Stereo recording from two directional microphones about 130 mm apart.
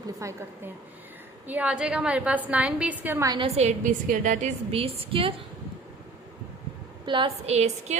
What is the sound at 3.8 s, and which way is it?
Speech, 85° right.